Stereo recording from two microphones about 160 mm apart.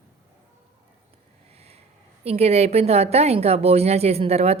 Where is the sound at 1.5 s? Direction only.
40° right (ahead or behind).